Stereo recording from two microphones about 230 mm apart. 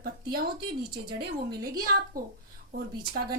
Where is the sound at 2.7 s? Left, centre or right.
Right.